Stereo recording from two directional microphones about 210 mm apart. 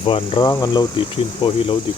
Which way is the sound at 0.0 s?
25° left (ahead or behind).